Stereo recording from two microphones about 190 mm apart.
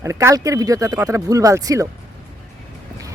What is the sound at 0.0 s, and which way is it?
A man's voice, 15° right (ahead or behind).